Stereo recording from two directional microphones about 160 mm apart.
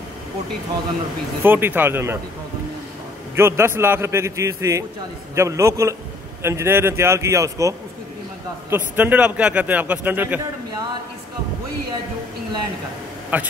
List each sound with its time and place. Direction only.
1.4 s a man's voice: 15° right (ahead or behind)
3.3 s a man's voice: 15° right (ahead or behind)
13.3 s a man's voice: 10° right (ahead or behind)